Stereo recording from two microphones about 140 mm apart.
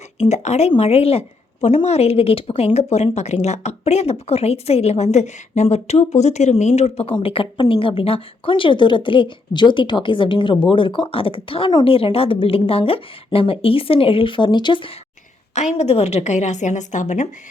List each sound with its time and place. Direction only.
0.2 s a woman's voice: 50° left (ahead or behind); by 14.9 s 35° left (ahead or behind)
15.5 s a woman's voice: 55° left (ahead or behind)